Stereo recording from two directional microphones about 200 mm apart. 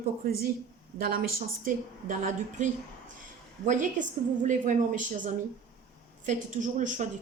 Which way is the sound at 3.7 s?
40° right (ahead or behind).